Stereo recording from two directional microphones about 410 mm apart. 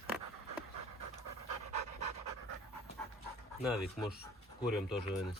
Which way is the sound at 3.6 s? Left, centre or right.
Centre.